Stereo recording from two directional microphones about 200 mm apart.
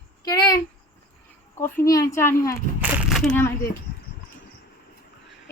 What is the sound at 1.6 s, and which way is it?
A woman's voice, 15° left (ahead or behind).